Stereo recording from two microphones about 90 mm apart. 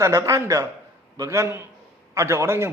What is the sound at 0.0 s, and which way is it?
A man's voice, 35° right (ahead or behind).